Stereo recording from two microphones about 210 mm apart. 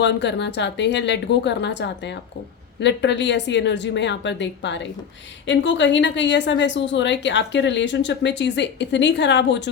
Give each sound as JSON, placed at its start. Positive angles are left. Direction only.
{"t": 0.0, "sound": "a woman's voice", "side_deg": 55}